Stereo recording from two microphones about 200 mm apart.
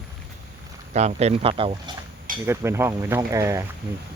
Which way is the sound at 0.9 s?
35° right (ahead or behind).